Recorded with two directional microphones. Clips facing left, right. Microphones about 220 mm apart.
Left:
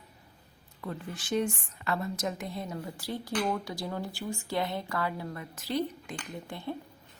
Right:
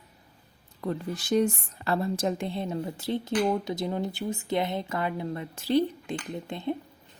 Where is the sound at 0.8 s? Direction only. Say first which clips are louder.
Right 7 dB; 40° right (ahead or behind); by 6.7 s 20° right (ahead or behind).